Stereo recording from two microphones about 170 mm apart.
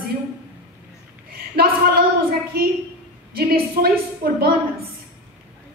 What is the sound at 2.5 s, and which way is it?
A woman's voice, 60° right (ahead or behind).